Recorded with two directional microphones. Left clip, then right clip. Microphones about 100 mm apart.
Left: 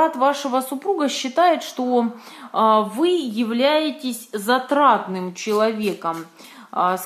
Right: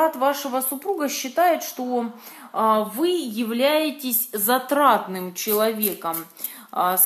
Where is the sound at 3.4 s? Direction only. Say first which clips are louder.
Left 1 dB; 15° right (ahead or behind); by 7.0 s centre (ahead or behind).